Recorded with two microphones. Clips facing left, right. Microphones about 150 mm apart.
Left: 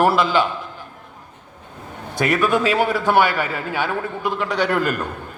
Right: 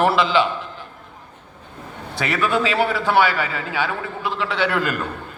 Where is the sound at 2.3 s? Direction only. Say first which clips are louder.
Left 2 dB; 50° left (ahead or behind).